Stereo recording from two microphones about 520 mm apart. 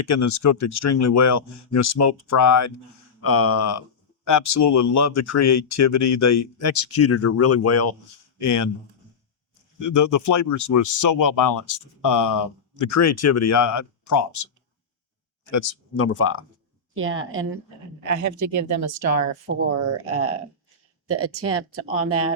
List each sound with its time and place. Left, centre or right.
0.0 s speech: left
9.8 s speech: left
15.4 s speech: left
16.9 s speech: right
18.0 s speech: right